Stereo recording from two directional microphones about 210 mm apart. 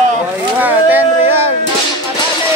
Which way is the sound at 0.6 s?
10° right (ahead or behind).